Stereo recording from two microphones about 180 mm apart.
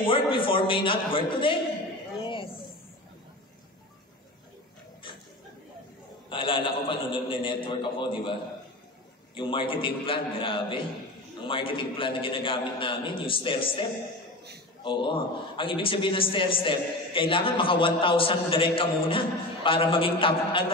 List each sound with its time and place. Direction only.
0.0 s a man's voice: 30° left (ahead or behind)
6.3 s a man's voice: 30° left (ahead or behind)